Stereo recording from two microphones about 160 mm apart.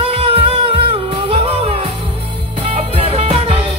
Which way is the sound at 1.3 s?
40° right (ahead or behind).